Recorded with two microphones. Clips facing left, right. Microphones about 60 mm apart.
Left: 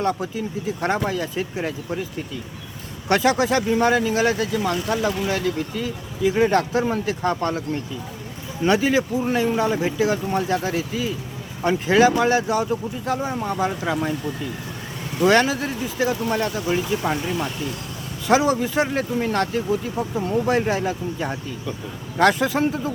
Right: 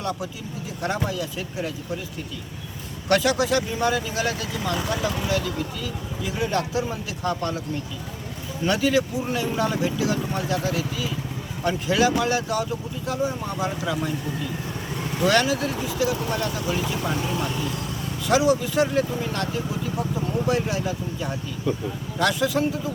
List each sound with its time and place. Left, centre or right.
0.0 s speech: left
3.1 s speech: left
8.6 s speech: left
15.2 s speech: left
18.3 s speech: left